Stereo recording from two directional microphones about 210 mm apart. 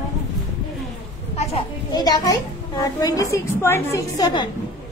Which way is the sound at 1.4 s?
30° left (ahead or behind).